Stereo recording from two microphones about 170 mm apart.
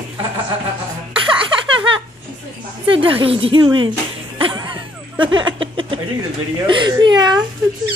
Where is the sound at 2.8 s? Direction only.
30° right (ahead or behind).